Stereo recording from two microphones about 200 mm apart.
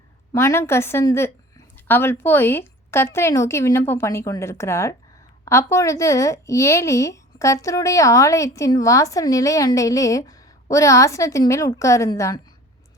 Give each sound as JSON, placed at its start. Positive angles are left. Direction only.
{"t": 0.3, "sound": "speech", "side_deg": 15}